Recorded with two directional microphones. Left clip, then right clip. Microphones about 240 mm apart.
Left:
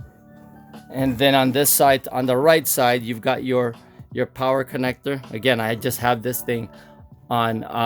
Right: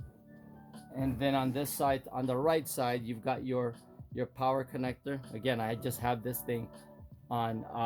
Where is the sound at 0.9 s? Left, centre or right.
Left.